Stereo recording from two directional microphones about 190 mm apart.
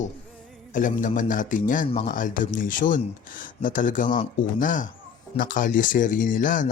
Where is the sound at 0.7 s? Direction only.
40° left (ahead or behind).